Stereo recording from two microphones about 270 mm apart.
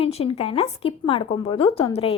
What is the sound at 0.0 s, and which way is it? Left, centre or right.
A woman's voice, left.